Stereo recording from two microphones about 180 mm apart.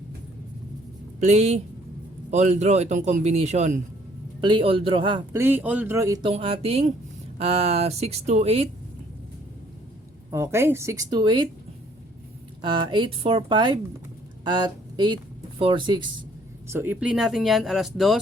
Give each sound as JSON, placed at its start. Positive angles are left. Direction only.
{"t": 1.2, "sound": "a man's voice", "side_deg": -35}
{"t": 4.4, "sound": "a woman's voice", "side_deg": -25}
{"t": 5.3, "sound": "speech", "side_deg": -10}
{"t": 6.3, "sound": "a man's voice", "side_deg": -35}
{"t": 10.3, "sound": "speech", "side_deg": -15}
{"t": 12.6, "sound": "a woman's voice", "side_deg": -25}
{"t": 16.6, "sound": "speech", "side_deg": -10}